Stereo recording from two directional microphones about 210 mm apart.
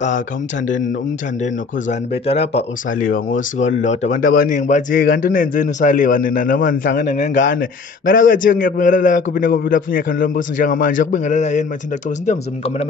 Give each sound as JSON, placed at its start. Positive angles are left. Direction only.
{"t": 1.4, "sound": "speech", "side_deg": 30}